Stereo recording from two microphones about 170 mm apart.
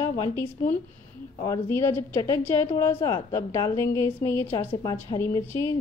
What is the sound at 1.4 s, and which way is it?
A woman's voice, 15° left (ahead or behind).